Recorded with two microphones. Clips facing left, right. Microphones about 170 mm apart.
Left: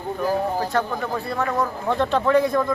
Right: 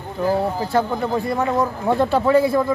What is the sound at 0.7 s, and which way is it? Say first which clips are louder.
Speech: right 4 dB; 10° right (ahead or behind).